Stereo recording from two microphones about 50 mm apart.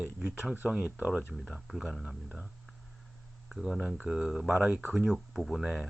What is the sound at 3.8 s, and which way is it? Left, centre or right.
Speech, right.